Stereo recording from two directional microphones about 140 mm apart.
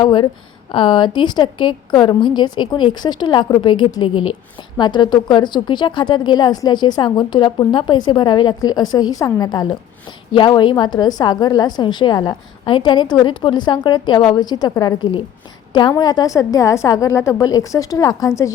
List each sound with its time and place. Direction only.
0.0 s a woman's voice: 35° left (ahead or behind)